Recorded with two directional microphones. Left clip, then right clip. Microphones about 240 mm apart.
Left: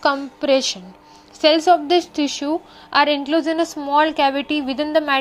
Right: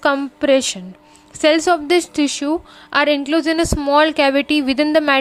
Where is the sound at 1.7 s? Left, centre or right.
Right.